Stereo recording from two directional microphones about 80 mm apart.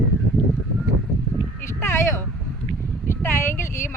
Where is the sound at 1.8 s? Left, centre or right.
Left.